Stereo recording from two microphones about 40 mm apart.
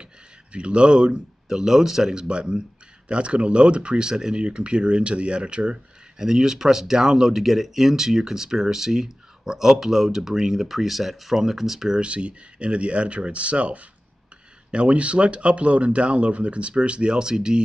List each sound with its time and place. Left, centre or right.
0.5 s speech: right
1.5 s speech: centre
12.0 s speech: right